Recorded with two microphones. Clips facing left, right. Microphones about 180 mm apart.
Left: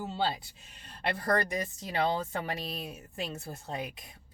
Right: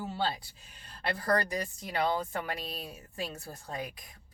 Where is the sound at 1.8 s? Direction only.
25° left (ahead or behind).